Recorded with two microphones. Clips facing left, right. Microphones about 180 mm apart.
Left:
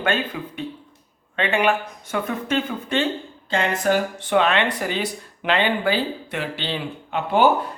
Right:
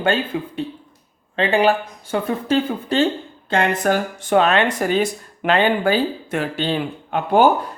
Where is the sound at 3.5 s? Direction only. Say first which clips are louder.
Right 2 dB; 55° right (ahead or behind).